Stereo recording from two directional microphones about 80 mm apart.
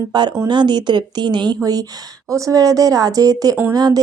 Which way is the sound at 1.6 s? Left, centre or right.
Right.